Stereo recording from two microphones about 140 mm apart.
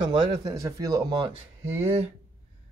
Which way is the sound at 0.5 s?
25° right (ahead or behind).